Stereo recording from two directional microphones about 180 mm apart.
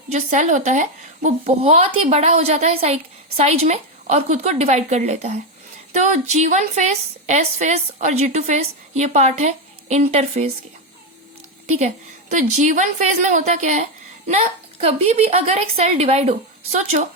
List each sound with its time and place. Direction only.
0.1 s a woman's voice: 40° right (ahead or behind)
12.3 s a woman's voice: 45° right (ahead or behind)